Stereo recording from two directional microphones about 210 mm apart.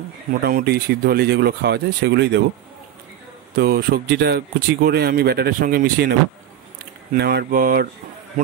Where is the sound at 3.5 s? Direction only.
45° right (ahead or behind).